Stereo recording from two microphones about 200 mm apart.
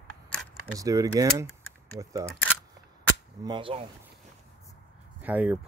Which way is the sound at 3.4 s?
25° right (ahead or behind).